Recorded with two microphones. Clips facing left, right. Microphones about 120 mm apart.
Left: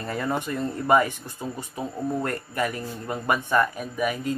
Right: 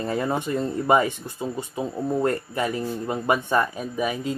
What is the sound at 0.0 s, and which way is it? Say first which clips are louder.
Speech: right 3 dB; 20° right (ahead or behind).